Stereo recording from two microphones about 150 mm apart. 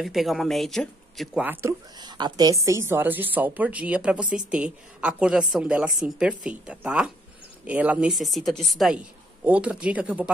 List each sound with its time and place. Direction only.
0.0 s speech: centre (ahead or behind)
1.4 s a woman's voice: 15° right (ahead or behind)
2.0 s a woman's voice: 30° right (ahead or behind); by 10.3 s 10° right (ahead or behind)